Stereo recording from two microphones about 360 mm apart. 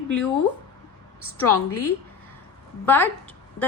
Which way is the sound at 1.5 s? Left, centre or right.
Left.